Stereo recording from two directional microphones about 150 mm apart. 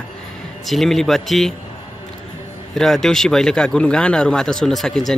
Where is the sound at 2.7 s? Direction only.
Centre (ahead or behind).